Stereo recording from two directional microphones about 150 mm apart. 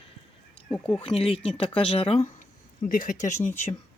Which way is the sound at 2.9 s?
60° left (ahead or behind).